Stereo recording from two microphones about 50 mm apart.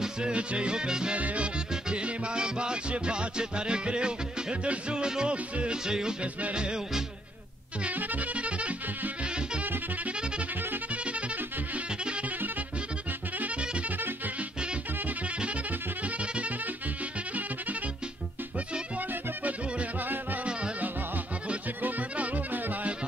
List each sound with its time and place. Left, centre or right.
0.0 s music: centre
7.8 s music: right
10.9 s music: right
13.6 s music: right
13.9 s music: right
15.0 s music: right
18.9 s music: right
21.8 s music: right